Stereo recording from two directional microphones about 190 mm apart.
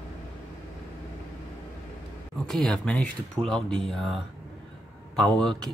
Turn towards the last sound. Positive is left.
turn(degrees=5)  # may be behind; listen again after turning